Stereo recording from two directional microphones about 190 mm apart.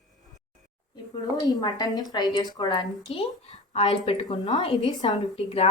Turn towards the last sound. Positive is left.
turn(degrees=25)  # may be behind; listen again after turning